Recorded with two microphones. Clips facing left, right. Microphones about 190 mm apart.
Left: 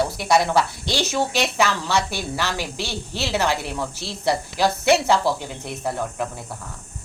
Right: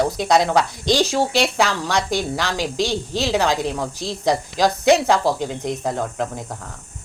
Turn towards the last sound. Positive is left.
turn(degrees=-15)  # may be behind; listen again after turning